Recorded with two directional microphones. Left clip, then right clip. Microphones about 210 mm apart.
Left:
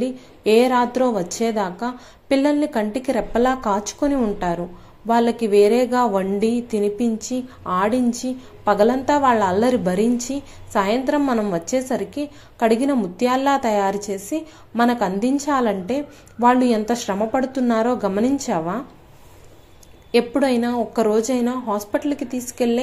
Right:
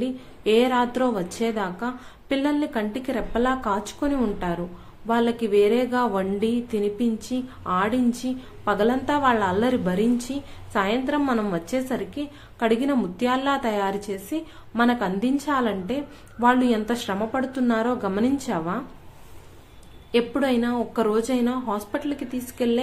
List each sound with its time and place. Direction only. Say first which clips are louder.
0.0 s speech: left 4 dB; 10° left (ahead or behind)
20.1 s speech: left 4 dB; 10° left (ahead or behind)